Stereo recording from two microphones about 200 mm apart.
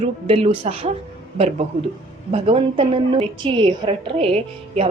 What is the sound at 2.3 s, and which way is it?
A woman's voice, 30° right (ahead or behind).